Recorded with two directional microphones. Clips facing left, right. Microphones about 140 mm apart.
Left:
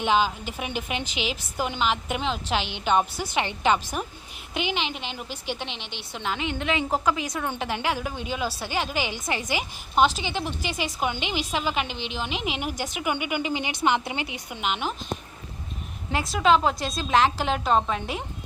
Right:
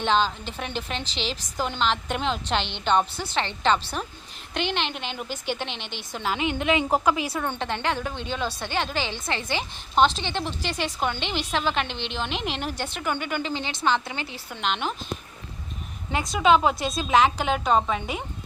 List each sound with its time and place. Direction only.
0.0 s a woman's voice: 10° left (ahead or behind)
6.3 s a woman's voice: 15° right (ahead or behind)
7.2 s a woman's voice: 5° right (ahead or behind)
7.4 s a woman's voice: 5° left (ahead or behind)
16.1 s a woman's voice: centre (ahead or behind)